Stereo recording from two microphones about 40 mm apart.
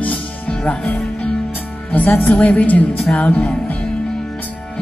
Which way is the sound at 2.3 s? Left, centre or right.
Left.